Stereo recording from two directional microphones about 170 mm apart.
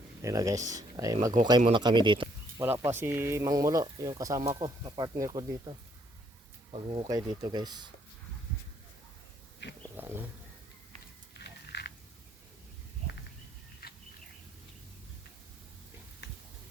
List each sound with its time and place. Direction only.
0.2 s speech: 20° right (ahead or behind)
2.6 s speech: 15° right (ahead or behind); by 7.1 s 35° right (ahead or behind)
7.1 s speech: 25° right (ahead or behind)
9.6 s dog: 90° left
10.0 s roaring cats: 10° right (ahead or behind)
11.3 s a sound: 75° left (ahead or behind)
16.2 s a sound: 80° left